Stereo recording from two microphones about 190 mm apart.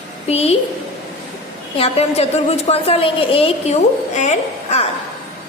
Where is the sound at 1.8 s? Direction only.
35° left (ahead or behind).